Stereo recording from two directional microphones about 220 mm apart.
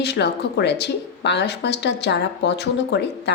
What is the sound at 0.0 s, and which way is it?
Speech, 50° left (ahead or behind).